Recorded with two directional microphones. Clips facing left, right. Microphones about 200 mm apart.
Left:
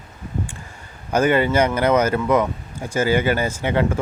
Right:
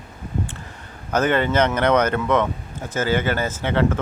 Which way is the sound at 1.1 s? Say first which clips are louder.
Left 2 dB; 10° left (ahead or behind).